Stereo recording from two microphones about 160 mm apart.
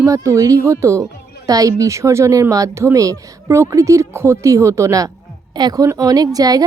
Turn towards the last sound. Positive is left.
turn(degrees=-25)  # may be behind; listen again after turning